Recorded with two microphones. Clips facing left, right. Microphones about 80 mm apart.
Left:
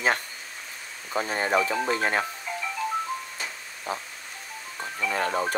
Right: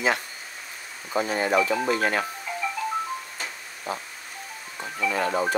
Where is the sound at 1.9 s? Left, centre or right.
Left.